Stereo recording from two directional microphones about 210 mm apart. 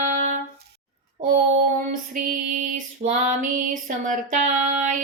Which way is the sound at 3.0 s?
35° right (ahead or behind).